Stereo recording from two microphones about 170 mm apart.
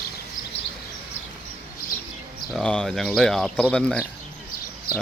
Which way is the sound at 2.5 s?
5° left (ahead or behind).